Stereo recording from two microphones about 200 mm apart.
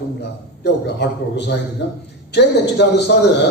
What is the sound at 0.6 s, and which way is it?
A man's voice, 60° left (ahead or behind).